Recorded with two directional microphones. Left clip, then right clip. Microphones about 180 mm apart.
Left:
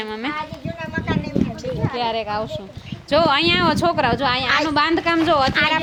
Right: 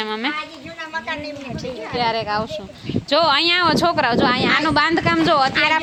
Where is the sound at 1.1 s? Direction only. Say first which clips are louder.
Left 3 dB; 35° left (ahead or behind).